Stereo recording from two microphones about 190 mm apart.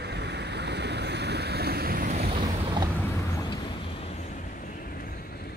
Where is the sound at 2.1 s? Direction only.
30° right (ahead or behind).